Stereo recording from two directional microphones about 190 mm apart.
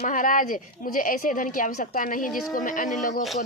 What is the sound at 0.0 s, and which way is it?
A woman's voice, 45° left (ahead or behind).